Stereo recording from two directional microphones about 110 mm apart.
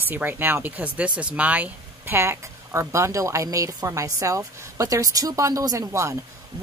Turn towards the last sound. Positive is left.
turn(degrees=-30)  # may be behind; listen again after turning